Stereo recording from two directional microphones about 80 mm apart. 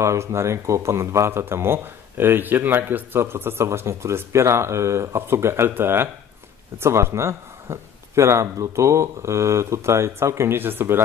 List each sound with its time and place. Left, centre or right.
0.0 s speech: right